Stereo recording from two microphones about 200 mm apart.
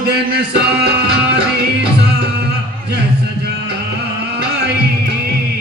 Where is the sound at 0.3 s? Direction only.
55° right (ahead or behind).